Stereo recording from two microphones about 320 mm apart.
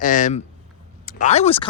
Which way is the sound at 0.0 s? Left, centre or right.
Left.